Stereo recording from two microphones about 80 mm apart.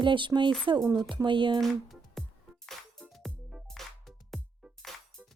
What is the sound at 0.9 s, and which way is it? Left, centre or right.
Speech, right.